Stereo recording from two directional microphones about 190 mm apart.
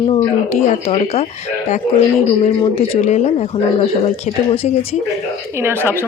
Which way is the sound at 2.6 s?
35° left (ahead or behind).